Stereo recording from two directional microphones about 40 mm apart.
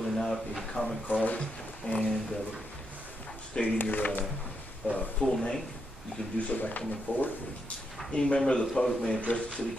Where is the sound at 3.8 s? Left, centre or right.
Left.